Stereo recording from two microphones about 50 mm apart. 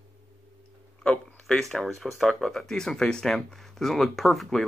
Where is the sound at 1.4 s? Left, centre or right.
Centre.